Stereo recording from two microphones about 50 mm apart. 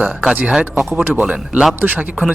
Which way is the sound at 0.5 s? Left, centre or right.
Centre.